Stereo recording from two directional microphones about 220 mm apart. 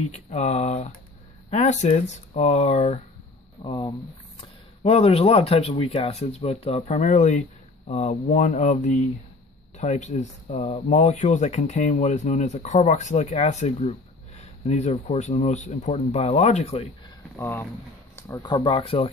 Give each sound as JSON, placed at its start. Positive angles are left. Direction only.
{"t": 0.1, "sound": "speech", "side_deg": 30}
{"t": 3.6, "sound": "speech", "side_deg": 20}
{"t": 17.4, "sound": "speech", "side_deg": 10}